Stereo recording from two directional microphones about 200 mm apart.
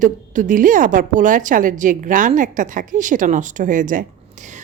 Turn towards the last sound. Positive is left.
turn(degrees=-35)  # may be behind; listen again after turning